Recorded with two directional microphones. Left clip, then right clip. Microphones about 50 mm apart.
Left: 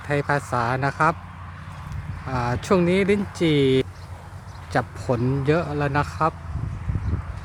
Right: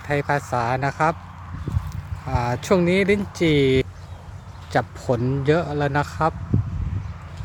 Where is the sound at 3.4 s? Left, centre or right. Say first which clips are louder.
Right 1 dB; right.